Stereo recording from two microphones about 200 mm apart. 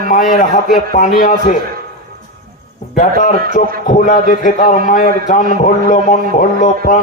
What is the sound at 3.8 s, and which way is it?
A man's voice, 40° left (ahead or behind).